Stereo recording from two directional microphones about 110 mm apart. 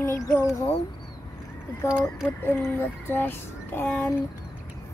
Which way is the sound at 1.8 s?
25° left (ahead or behind).